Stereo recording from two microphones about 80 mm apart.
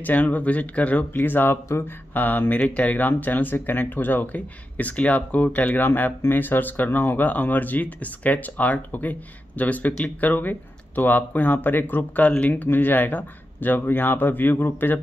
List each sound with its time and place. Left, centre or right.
0.0 s speech: left